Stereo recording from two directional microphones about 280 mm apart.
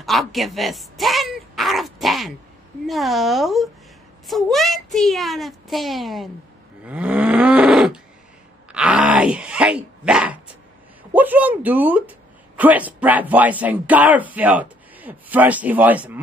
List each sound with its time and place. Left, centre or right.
0.0 s a child's voice: centre
6.8 s cattle: centre
8.7 s groan: centre
11.1 s speech: centre